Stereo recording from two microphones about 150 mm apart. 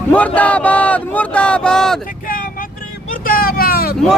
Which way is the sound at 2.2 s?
70° left (ahead or behind).